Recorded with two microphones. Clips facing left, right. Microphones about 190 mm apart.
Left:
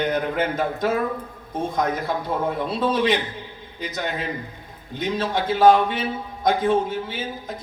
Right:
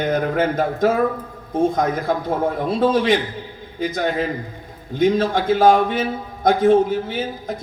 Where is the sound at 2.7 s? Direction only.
50° right (ahead or behind).